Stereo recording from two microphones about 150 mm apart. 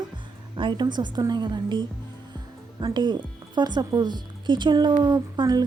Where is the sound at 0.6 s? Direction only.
30° right (ahead or behind).